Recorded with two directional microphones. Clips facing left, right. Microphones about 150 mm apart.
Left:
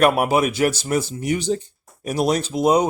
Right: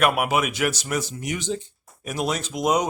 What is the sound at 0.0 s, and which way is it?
Speech, 35° left (ahead or behind).